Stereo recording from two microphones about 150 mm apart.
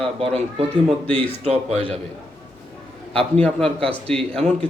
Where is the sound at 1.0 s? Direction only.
10° left (ahead or behind).